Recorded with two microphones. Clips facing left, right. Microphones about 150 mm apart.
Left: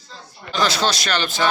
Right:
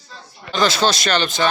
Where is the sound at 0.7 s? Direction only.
Centre (ahead or behind).